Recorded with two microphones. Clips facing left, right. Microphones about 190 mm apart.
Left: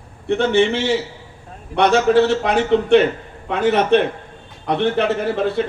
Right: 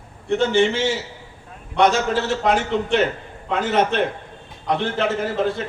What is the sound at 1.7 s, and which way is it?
A man's voice, 65° left (ahead or behind).